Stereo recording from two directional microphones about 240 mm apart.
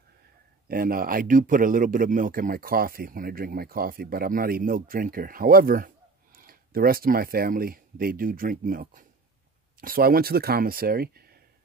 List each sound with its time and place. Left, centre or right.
0.7 s a man's voice: right